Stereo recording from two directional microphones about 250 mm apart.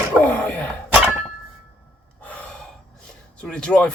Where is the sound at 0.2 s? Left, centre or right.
Centre.